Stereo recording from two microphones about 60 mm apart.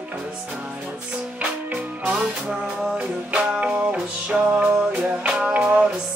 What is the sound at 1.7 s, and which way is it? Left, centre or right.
Music, right.